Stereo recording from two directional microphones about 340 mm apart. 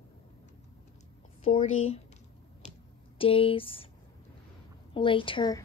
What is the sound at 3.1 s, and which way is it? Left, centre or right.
Speech, centre.